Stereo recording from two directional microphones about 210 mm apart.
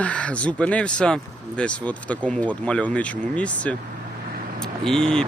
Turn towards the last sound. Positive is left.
turn(degrees=5)  # may be behind; listen again after turning